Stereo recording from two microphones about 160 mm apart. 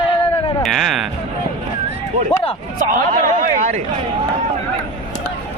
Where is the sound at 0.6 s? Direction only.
Centre (ahead or behind).